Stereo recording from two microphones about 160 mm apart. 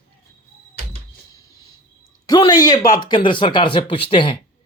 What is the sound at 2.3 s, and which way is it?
Speech, 25° left (ahead or behind).